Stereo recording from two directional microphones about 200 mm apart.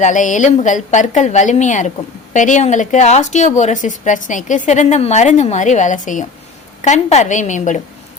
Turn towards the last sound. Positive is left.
turn(degrees=35)  # may be behind; listen again after turning